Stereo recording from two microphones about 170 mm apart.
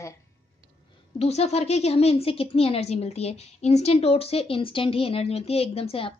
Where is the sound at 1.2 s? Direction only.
40° left (ahead or behind).